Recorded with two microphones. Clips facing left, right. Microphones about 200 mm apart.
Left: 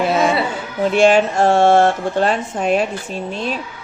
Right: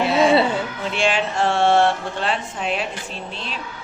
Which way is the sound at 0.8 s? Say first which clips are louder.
Left 13 dB; 45° left (ahead or behind).